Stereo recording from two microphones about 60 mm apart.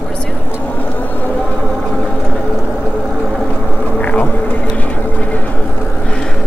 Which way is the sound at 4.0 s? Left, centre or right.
Left.